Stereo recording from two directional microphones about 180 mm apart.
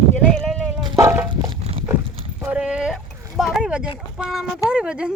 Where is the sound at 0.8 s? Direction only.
15° right (ahead or behind).